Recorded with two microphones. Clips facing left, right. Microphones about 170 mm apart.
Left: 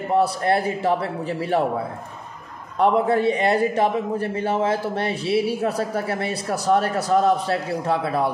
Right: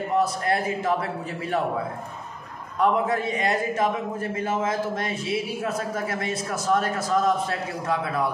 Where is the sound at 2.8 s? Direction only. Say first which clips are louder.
Left 4 dB; 30° left (ahead or behind).